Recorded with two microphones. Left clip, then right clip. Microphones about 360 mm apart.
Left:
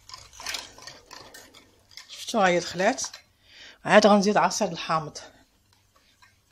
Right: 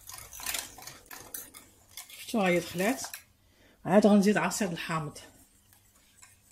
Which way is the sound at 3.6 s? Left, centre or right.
Left.